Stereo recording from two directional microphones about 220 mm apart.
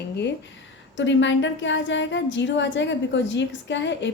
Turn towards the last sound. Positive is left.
turn(degrees=55)  # may be behind; listen again after turning